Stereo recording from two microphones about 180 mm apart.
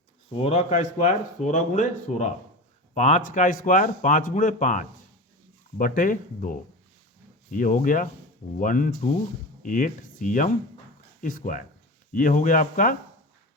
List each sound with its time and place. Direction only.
0.4 s speech: 40° left (ahead or behind)